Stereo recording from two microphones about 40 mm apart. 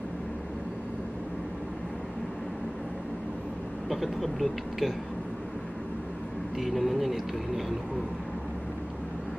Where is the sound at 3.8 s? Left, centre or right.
Centre.